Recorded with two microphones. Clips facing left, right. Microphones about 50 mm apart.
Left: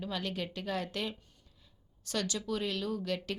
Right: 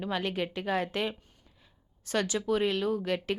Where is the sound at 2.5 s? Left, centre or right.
Right.